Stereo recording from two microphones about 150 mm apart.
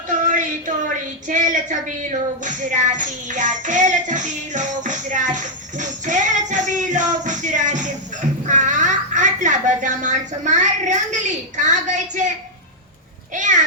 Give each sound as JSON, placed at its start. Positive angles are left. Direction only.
{"t": 0.1, "sound": "a sound", "side_deg": -60}
{"t": 1.3, "sound": "a woman's voice", "side_deg": -55}
{"t": 2.4, "sound": "music", "side_deg": -55}
{"t": 13.3, "sound": "music", "side_deg": -55}